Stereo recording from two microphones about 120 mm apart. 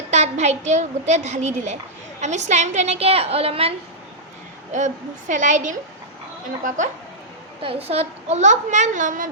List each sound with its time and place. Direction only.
0.1 s a woman's voice: 70° right (ahead or behind); by 3.8 s 55° right (ahead or behind)
5.3 s a woman's voice: 90° right
7.6 s a woman's voice: 50° right (ahead or behind); by 9.2 s 90° right